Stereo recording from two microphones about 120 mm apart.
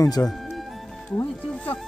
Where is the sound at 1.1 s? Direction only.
15° left (ahead or behind).